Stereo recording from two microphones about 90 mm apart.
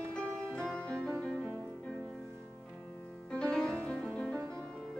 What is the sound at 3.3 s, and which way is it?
Music, 10° left (ahead or behind).